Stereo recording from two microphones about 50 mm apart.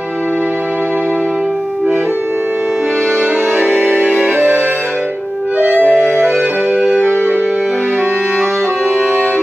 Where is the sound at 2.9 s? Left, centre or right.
Right.